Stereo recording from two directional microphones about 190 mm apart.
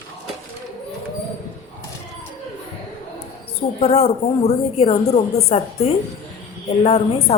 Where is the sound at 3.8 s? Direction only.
35° left (ahead or behind).